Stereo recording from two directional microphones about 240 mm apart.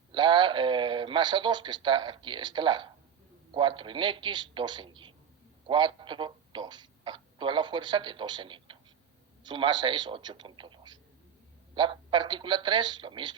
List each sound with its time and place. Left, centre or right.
0.1 s a man's voice: centre